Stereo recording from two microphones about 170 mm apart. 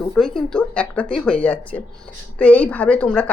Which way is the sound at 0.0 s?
Centre (ahead or behind).